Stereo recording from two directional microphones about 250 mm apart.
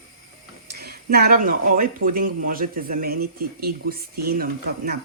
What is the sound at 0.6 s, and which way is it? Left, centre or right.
Speech, right.